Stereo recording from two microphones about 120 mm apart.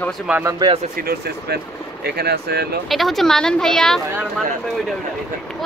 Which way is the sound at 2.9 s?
Centre (ahead or behind).